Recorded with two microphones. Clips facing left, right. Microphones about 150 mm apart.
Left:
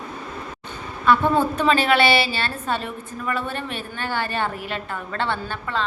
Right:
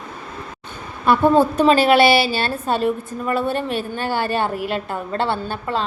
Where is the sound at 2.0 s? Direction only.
10° right (ahead or behind).